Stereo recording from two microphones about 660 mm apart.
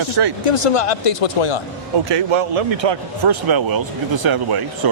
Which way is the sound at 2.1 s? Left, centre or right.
Right.